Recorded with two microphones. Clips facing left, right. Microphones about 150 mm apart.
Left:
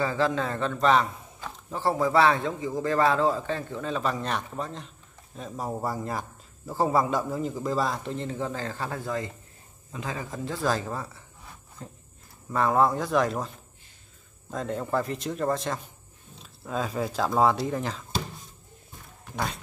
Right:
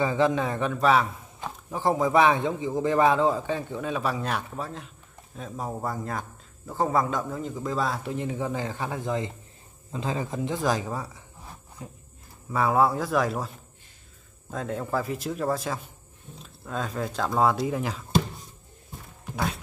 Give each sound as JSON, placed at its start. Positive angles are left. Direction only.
{"t": 0.0, "sound": "a man's voice", "side_deg": -20}
{"t": 14.5, "sound": "a man's voice", "side_deg": 0}
{"t": 19.3, "sound": "speech", "side_deg": 0}